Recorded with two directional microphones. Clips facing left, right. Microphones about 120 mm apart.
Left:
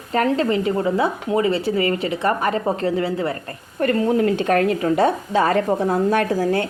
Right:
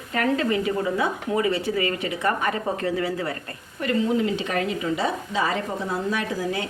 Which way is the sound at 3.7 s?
55° left (ahead or behind).